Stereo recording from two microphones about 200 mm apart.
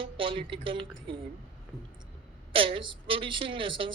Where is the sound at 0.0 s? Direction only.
25° right (ahead or behind).